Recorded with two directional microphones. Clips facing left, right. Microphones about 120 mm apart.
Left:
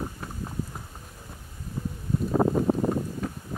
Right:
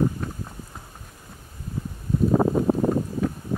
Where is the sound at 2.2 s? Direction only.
45° right (ahead or behind).